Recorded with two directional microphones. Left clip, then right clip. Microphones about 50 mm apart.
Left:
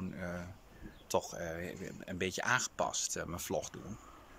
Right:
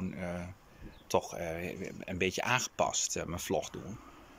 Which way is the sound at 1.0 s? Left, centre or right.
Centre.